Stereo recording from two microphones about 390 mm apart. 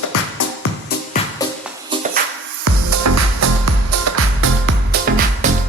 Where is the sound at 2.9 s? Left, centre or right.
Right.